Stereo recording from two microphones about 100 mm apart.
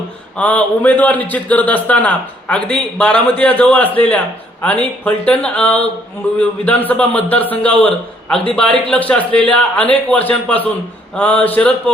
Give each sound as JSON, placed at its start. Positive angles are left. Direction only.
{"t": 0.3, "sound": "a man's voice", "side_deg": 15}